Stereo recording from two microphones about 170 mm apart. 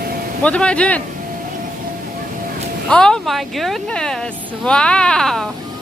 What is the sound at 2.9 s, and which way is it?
Speech, 5° left (ahead or behind).